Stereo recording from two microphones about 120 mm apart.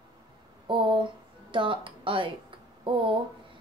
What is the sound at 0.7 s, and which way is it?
Speech, 40° right (ahead or behind).